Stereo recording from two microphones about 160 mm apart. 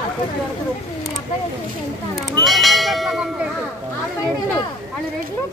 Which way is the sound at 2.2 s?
Centre (ahead or behind).